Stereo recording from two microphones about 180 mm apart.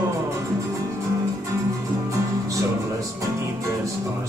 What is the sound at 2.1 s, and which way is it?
Music, 15° right (ahead or behind).